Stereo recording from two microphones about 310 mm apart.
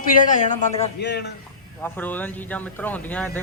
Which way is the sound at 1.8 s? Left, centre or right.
Centre.